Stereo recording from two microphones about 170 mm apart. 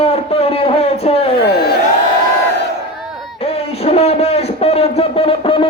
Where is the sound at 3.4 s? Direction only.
35° left (ahead or behind).